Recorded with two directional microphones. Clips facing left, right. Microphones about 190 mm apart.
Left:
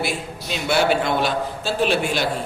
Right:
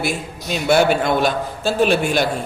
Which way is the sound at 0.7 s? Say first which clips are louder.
Right 4 dB; 45° right (ahead or behind).